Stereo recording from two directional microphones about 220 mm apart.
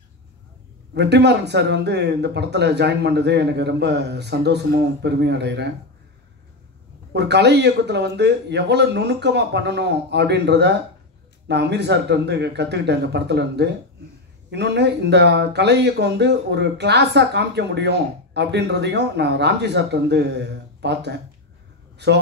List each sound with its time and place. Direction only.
0.9 s speech: 50° right (ahead or behind)
7.1 s speech: 50° right (ahead or behind)
21.9 s a sound: 50° right (ahead or behind)